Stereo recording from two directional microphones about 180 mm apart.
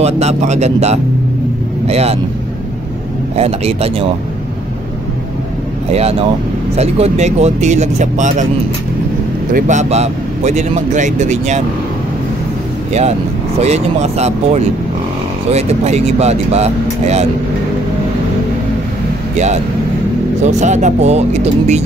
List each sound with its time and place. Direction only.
0.0 s speech: 35° right (ahead or behind)
3.3 s speech: 35° right (ahead or behind)
5.9 s speech: 35° right (ahead or behind)
9.5 s speech: 45° right (ahead or behind)
13.6 s speech: 35° right (ahead or behind)
19.3 s speech: 40° right (ahead or behind)